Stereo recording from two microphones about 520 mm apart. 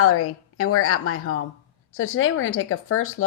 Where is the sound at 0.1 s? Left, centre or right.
Left.